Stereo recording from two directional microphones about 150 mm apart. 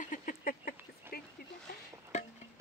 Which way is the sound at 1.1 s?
90° left.